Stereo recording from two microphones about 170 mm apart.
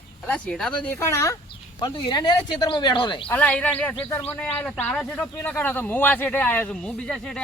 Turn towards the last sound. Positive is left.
turn(degrees=5)  # may be behind; listen again after turning